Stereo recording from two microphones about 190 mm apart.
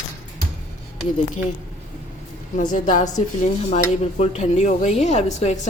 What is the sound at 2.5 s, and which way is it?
Speech, 45° left (ahead or behind).